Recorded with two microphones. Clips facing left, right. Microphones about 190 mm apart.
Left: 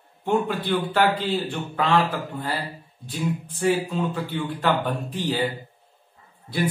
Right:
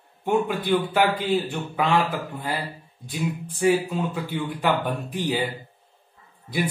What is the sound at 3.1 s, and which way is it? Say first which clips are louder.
Speech: left 1 dB; 10° right (ahead or behind).